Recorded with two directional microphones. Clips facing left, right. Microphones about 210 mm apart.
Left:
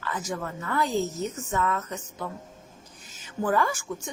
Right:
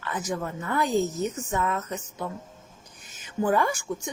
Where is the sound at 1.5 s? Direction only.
15° right (ahead or behind).